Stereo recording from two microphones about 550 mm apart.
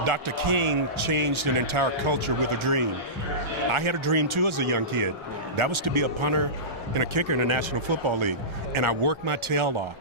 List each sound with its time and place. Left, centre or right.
0.0 s speech: right